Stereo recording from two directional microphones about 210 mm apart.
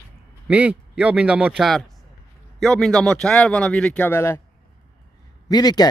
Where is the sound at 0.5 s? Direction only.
5° right (ahead or behind); by 4.4 s 10° left (ahead or behind).